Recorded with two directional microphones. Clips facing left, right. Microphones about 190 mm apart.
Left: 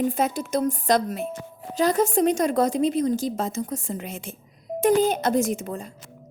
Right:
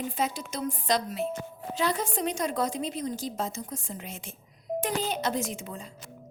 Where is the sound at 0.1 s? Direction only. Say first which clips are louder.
Left 7 dB; 50° left (ahead or behind).